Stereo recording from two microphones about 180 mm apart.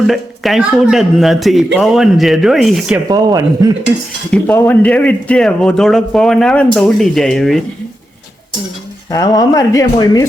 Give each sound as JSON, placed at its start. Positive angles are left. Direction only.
{"t": 0.1, "sound": "a man's voice", "side_deg": 0}
{"t": 3.1, "sound": "speech", "side_deg": -20}
{"t": 4.3, "sound": "a man's voice", "side_deg": 10}
{"t": 9.0, "sound": "speech", "side_deg": 20}